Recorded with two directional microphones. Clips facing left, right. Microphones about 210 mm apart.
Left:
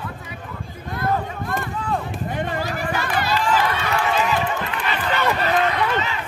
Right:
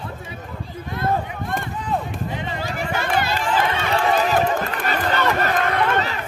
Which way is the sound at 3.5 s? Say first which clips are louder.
Even; 30° right (ahead or behind).